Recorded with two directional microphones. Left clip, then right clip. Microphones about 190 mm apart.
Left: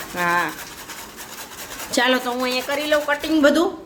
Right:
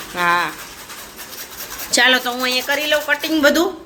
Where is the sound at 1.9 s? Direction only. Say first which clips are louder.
Right 5 dB; 10° left (ahead or behind).